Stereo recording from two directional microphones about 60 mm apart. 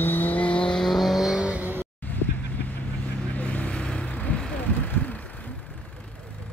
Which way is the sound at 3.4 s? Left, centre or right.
Left.